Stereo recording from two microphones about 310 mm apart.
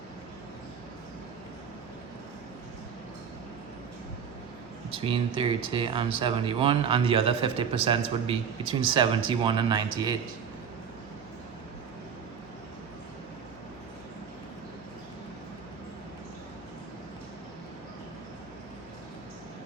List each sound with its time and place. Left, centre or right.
4.9 s speech: centre